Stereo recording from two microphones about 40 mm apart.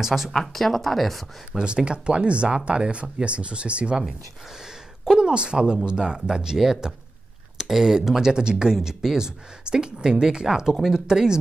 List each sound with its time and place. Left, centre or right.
0.0 s speech: centre
0.3 s speech: centre
1.6 s speech: right
5.1 s speech: right